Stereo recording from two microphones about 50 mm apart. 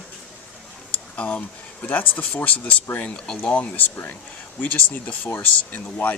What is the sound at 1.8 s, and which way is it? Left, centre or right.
Speech, left.